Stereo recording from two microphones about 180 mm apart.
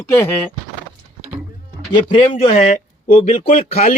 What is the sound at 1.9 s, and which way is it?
Speech, 30° left (ahead or behind).